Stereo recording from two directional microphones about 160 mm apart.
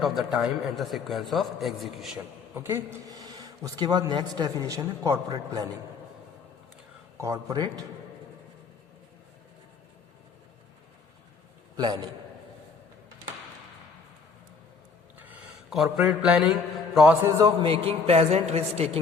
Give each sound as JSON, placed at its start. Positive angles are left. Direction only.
{"t": 0.0, "sound": "a man's voice", "side_deg": 0}
{"t": 2.6, "sound": "a man's voice", "side_deg": -15}
{"t": 7.2, "sound": "a man's voice", "side_deg": -20}
{"t": 11.8, "sound": "a man's voice", "side_deg": -25}
{"t": 15.2, "sound": "a man's voice", "side_deg": -5}
{"t": 17.2, "sound": "a man's voice", "side_deg": -20}
{"t": 17.7, "sound": "a woman's voice", "side_deg": -35}